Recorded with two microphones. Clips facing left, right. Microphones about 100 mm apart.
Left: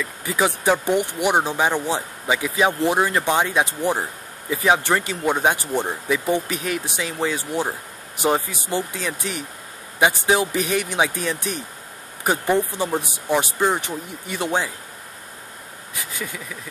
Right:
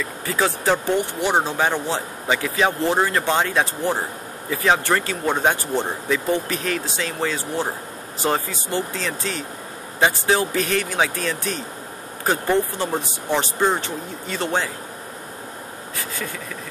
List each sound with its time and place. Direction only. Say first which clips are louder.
0.2 s speech: left 1 dB; 15° left (ahead or behind)
16.0 s speech: right 1 dB; 15° left (ahead or behind)